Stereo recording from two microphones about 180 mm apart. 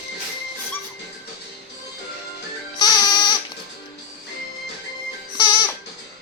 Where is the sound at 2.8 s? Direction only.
20° left (ahead or behind).